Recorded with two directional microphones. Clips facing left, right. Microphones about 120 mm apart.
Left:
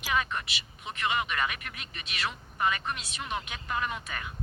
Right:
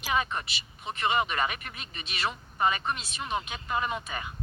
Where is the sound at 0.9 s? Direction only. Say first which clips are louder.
Right 3 dB; 30° right (ahead or behind).